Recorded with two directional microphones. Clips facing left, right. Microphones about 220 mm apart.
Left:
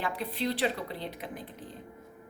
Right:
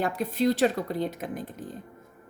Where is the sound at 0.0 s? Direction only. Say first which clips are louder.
Right 7 dB; 45° right (ahead or behind).